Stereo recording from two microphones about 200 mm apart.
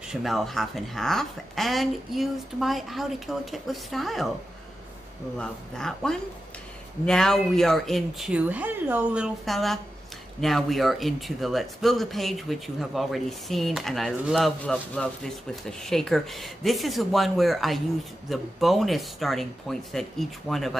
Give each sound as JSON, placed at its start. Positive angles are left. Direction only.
{"t": 0.1, "sound": "speech", "side_deg": 0}
{"t": 5.4, "sound": "speech", "side_deg": 5}